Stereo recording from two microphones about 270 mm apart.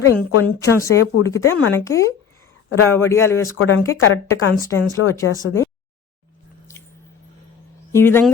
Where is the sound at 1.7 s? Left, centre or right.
Centre.